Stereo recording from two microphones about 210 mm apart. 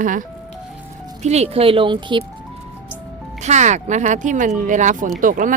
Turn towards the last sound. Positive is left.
turn(degrees=-40)  # may be behind; listen again after turning